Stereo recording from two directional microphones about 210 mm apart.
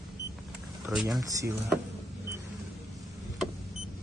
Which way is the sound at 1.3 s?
15° right (ahead or behind).